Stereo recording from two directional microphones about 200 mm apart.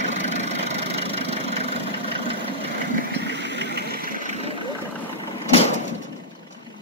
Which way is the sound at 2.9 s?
55° right (ahead or behind).